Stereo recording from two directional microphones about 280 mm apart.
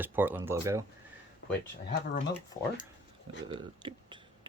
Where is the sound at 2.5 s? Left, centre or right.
Left.